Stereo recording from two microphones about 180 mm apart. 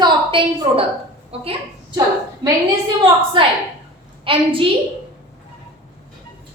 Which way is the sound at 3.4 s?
25° right (ahead or behind).